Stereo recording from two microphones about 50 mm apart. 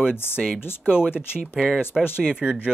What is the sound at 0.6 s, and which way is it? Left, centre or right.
Speech, left.